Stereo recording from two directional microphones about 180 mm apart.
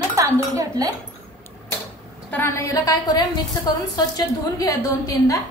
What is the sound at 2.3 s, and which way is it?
A woman's voice, 15° left (ahead or behind).